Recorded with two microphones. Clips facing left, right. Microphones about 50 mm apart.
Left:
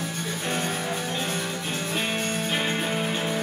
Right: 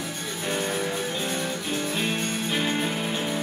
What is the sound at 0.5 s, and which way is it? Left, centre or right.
Music, centre.